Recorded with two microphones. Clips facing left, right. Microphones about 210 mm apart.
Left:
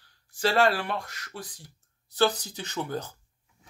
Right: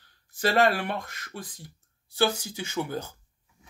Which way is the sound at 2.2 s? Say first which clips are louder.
Left 1 dB; 10° right (ahead or behind).